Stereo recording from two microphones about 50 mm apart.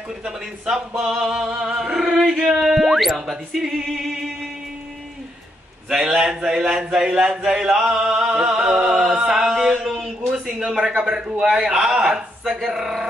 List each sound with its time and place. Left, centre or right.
0.2 s a man's voice: centre
2.3 s a sound: centre
3.2 s speech: centre
5.9 s a man's voice: centre
7.8 s music: centre
9.8 s a sound: centre
11.0 s a man's voice: centre